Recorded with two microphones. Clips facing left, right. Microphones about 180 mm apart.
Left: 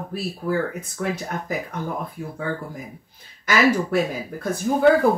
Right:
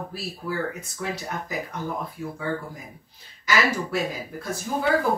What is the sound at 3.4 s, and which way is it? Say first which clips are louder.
Speech: left 5 dB; 55° left (ahead or behind).